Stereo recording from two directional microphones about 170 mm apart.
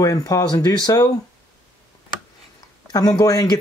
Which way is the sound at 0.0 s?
20° left (ahead or behind).